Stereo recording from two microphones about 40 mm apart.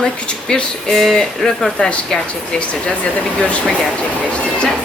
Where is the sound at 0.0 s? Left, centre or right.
Left.